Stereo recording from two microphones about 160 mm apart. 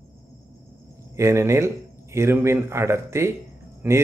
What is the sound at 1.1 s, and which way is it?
Speech, 15° right (ahead or behind).